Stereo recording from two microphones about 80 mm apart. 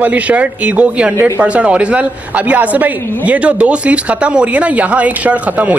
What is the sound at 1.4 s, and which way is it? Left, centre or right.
A man's voice, centre.